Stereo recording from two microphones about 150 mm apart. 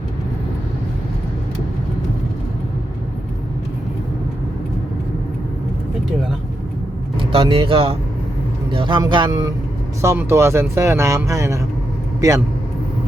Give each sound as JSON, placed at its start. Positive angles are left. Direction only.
{"t": 7.2, "sound": "speech", "side_deg": -35}